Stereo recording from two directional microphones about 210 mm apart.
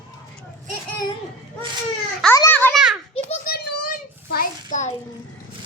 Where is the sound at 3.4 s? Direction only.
45° left (ahead or behind).